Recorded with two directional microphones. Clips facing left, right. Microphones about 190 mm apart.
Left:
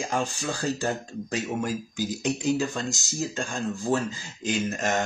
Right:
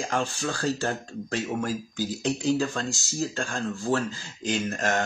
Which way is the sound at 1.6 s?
15° left (ahead or behind).